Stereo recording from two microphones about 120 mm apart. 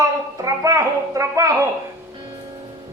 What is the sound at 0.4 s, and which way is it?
A man's voice, 30° right (ahead or behind).